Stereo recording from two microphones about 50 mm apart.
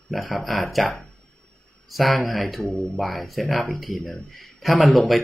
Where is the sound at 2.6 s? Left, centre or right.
Left.